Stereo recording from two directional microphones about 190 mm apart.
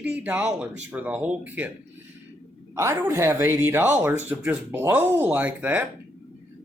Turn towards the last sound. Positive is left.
turn(degrees=-10)  # may be behind; listen again after turning